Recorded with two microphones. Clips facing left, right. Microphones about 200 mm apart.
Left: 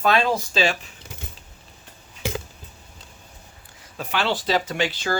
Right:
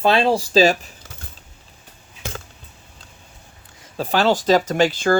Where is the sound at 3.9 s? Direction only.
35° right (ahead or behind).